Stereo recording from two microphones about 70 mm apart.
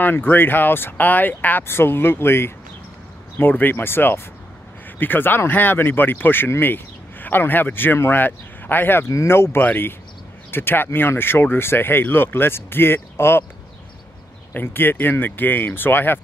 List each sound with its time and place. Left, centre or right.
0.0 s speech: left
9.1 s speech: left
14.5 s speech: left